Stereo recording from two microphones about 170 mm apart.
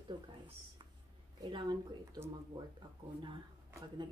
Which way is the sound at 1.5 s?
25° right (ahead or behind).